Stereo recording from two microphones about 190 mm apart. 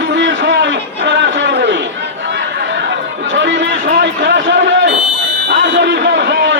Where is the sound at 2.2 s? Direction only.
70° right (ahead or behind).